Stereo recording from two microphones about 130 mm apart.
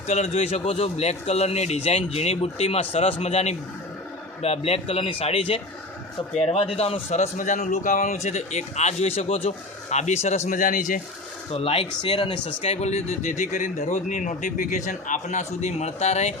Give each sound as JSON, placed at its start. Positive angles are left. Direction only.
{"t": 0.1, "sound": "a man's voice", "side_deg": 60}
{"t": 11.5, "sound": "speech", "side_deg": 50}